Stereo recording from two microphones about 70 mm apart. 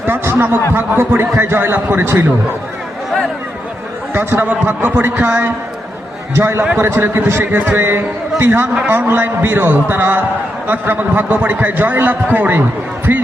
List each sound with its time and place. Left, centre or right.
0.0 s a man's voice: right
4.1 s a man's voice: right
6.4 s a man's voice: right
13.1 s a sound: right